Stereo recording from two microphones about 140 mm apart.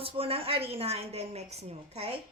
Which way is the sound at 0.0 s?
45° right (ahead or behind).